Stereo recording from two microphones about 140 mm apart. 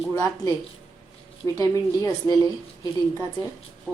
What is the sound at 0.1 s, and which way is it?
Speech, 20° left (ahead or behind).